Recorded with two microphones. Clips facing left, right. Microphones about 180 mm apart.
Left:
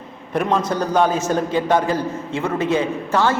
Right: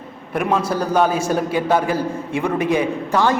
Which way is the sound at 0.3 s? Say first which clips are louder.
Even; 10° right (ahead or behind).